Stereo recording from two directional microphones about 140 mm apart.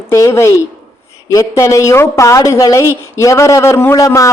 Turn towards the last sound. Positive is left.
turn(degrees=25)  # may be behind; listen again after turning